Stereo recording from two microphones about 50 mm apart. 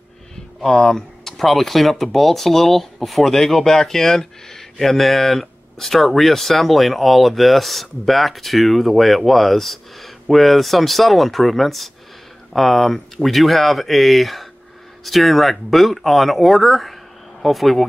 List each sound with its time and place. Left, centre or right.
0.6 s speech: centre